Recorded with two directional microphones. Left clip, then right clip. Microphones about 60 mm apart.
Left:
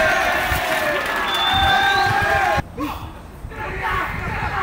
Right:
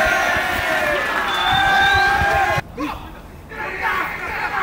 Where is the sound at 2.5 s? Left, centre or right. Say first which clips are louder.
Even; right.